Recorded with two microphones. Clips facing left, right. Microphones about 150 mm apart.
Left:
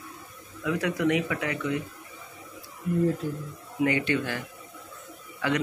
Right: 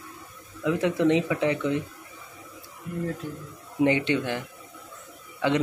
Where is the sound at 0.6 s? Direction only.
25° right (ahead or behind).